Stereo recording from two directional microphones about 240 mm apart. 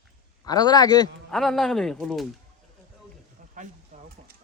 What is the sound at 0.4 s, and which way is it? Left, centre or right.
Speech, centre.